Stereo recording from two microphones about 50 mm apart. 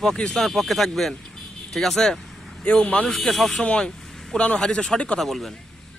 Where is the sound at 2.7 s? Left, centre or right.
Left.